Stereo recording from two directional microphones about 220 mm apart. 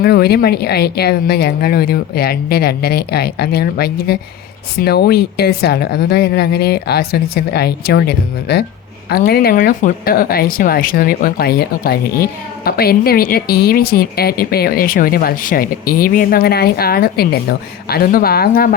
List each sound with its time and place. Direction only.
0.0 s speech: 45° left (ahead or behind)